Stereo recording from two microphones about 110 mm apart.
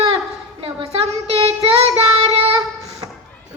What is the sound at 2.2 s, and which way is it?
Child singing, 65° right (ahead or behind).